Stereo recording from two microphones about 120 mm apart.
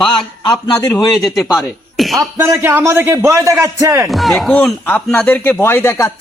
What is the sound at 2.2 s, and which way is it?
A man's voice, 25° right (ahead or behind).